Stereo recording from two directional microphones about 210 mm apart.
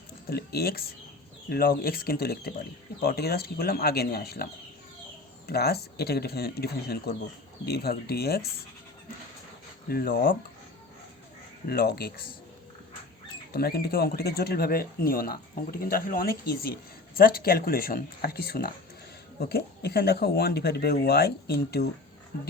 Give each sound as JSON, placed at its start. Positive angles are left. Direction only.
{"t": 0.3, "sound": "speech", "side_deg": 45}
{"t": 5.5, "sound": "speech", "side_deg": 50}
{"t": 9.9, "sound": "speech", "side_deg": 45}
{"t": 11.7, "sound": "speech", "side_deg": 50}
{"t": 13.5, "sound": "speech", "side_deg": 45}